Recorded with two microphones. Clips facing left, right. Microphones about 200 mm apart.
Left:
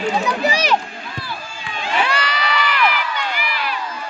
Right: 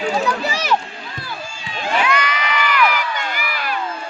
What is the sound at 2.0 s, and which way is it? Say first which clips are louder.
Crowd: right 2 dB; 30° left (ahead or behind).